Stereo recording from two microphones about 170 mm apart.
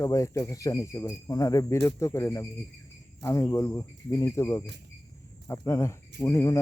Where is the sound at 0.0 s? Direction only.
20° left (ahead or behind).